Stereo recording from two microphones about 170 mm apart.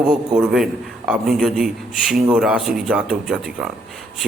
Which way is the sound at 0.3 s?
Centre (ahead or behind).